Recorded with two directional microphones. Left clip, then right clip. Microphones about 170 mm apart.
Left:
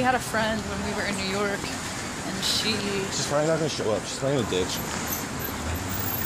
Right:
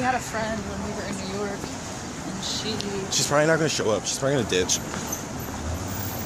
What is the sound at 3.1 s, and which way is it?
Speech, 30° right (ahead or behind).